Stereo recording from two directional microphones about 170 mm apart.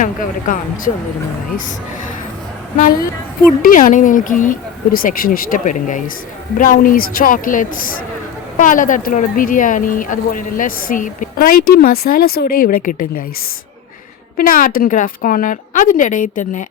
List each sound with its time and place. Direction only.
0.0 s speech: 50° left (ahead or behind)
3.6 s speech: 55° left (ahead or behind)
14.3 s speech: 55° left (ahead or behind)